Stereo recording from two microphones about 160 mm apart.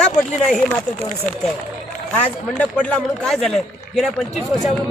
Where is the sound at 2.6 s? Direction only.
5° left (ahead or behind).